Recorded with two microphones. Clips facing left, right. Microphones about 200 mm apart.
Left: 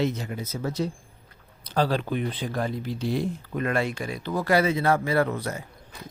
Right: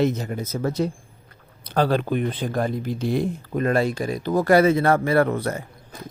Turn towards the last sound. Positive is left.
turn(degrees=-55)  # may be behind; listen again after turning